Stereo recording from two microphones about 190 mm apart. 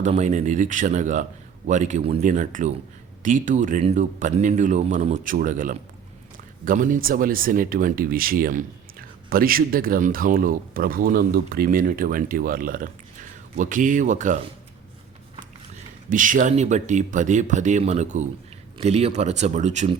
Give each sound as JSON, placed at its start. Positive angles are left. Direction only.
{"t": 0.0, "sound": "speech", "side_deg": -40}
{"t": 16.0, "sound": "speech", "side_deg": -45}